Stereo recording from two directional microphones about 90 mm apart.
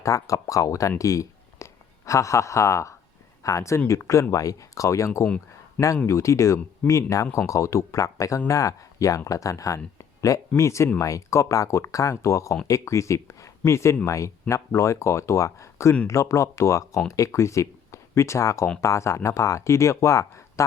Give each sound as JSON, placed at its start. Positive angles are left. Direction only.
{"t": 0.0, "sound": "speech", "side_deg": 40}
{"t": 5.2, "sound": "a sound", "side_deg": 15}
{"t": 6.1, "sound": "speech", "side_deg": 35}